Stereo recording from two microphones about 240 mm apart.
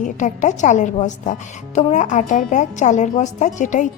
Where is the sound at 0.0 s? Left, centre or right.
Left.